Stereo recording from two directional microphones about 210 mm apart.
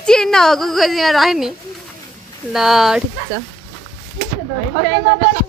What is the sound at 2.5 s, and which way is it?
Speech, centre (ahead or behind).